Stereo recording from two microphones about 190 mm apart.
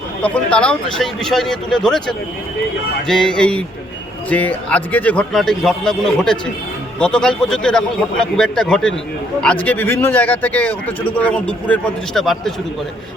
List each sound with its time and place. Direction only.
0.2 s a man's voice: 5° left (ahead or behind)